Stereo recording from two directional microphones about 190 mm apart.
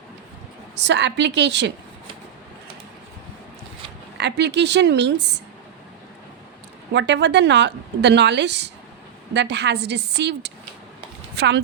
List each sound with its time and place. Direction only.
0.8 s a woman's voice: 65° right (ahead or behind)
4.2 s a woman's voice: 65° right (ahead or behind)
6.9 s a woman's voice: 65° right (ahead or behind)